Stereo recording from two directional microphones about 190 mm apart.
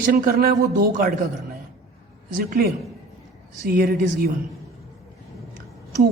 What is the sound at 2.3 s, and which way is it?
Speech, 50° right (ahead or behind).